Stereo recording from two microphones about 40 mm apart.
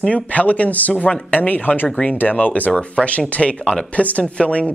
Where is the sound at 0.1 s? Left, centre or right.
Left.